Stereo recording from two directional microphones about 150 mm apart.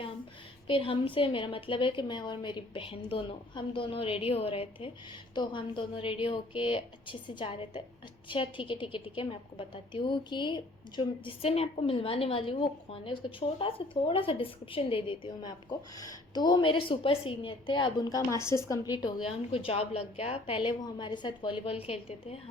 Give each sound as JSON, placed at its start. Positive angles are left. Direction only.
{"t": 0.7, "sound": "a woman's voice", "side_deg": 35}